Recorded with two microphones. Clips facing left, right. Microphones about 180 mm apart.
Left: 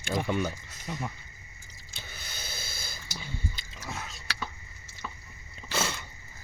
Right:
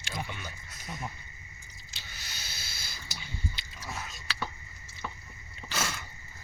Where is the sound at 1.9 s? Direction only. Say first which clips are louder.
Left 4 dB; 55° left (ahead or behind).